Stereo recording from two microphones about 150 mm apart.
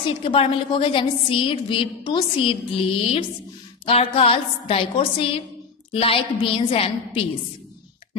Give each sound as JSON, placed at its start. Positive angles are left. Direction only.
{"t": 0.0, "sound": "a woman's voice", "side_deg": 35}